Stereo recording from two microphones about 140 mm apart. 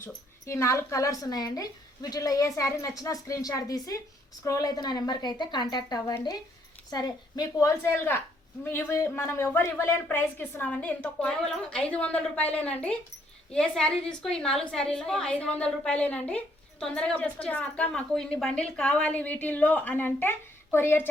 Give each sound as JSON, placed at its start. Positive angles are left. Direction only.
{"t": 0.0, "sound": "a woman's voice", "side_deg": 20}